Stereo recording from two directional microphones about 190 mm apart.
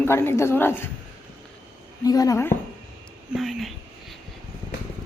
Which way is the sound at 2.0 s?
20° left (ahead or behind).